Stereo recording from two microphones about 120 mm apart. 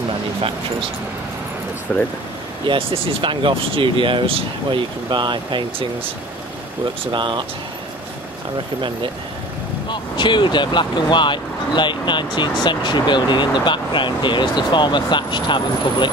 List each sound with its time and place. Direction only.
1.9 s speech: 10° left (ahead or behind)
2.6 s speech: 45° right (ahead or behind)
7.1 s speech: 40° right (ahead or behind)
9.8 s speech: 40° left (ahead or behind)